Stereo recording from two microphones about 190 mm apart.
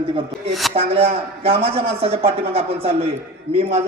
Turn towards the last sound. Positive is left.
turn(degrees=-30)  # may be behind; listen again after turning